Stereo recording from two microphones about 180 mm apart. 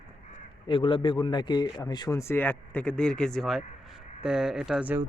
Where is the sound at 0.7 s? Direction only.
30° left (ahead or behind).